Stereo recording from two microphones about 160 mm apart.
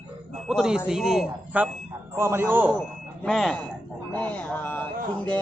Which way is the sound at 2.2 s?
15° right (ahead or behind).